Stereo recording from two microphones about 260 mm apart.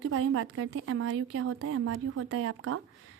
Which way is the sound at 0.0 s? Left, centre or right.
Right.